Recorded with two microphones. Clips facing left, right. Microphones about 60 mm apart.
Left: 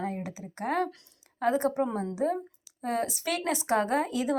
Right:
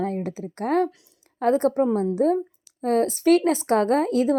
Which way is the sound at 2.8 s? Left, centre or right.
Right.